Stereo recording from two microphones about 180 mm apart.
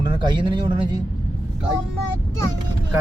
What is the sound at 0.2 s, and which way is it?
Speech, 25° right (ahead or behind).